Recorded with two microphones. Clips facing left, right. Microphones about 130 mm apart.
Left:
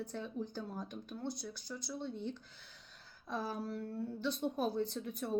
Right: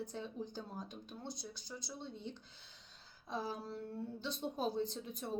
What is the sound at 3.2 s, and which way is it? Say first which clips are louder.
Speech: left 2 dB; 20° right (ahead or behind).